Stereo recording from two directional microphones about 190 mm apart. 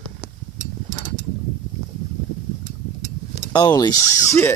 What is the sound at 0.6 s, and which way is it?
Mechanisms, 40° right (ahead or behind).